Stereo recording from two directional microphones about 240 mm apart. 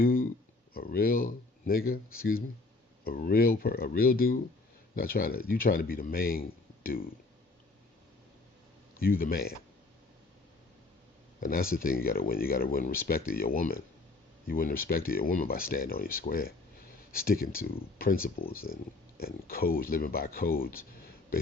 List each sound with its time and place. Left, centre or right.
0.0 s a sound: left
0.7 s speech: left
9.0 s speech: left
11.3 s speech: left